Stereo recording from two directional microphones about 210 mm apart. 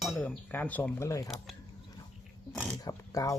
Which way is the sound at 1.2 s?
Centre (ahead or behind).